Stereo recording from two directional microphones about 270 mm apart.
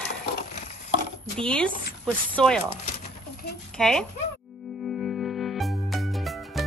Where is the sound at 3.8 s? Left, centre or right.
Centre.